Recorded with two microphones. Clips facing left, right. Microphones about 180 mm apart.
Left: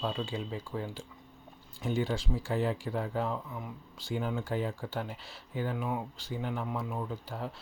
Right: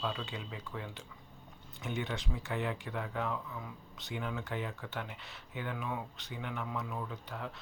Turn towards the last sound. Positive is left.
turn(degrees=30)  # may be behind; listen again after turning